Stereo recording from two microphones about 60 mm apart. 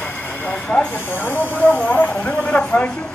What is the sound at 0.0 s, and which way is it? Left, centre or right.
Train, left.